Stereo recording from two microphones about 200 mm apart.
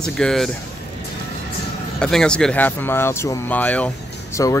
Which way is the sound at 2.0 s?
5° left (ahead or behind).